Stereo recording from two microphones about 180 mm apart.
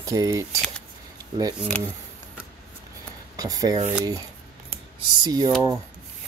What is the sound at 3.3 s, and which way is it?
Speech, 20° right (ahead or behind).